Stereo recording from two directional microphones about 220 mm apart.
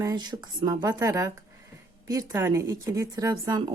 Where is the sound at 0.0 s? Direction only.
20° right (ahead or behind).